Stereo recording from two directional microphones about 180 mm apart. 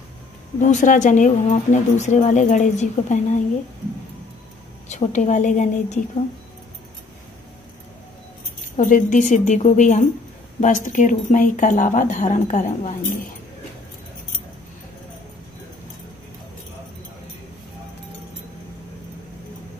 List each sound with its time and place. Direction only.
0.6 s speech: 45° left (ahead or behind)
4.8 s a woman's voice: 40° left (ahead or behind)
8.7 s speech: 45° left (ahead or behind)